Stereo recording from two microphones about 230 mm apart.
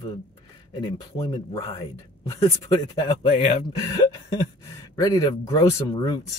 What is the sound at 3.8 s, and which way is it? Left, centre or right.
Speech, centre.